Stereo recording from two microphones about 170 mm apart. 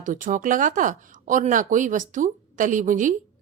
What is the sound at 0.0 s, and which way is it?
Speech, 50° right (ahead or behind).